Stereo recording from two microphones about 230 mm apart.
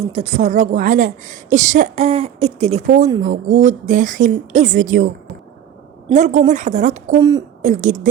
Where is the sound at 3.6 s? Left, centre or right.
Right.